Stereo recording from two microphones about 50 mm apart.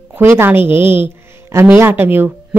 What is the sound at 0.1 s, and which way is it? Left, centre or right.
Speech, right.